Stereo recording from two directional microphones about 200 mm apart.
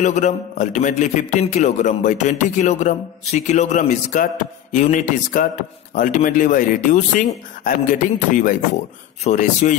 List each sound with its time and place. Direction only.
0.0 s a man's voice: 35° left (ahead or behind)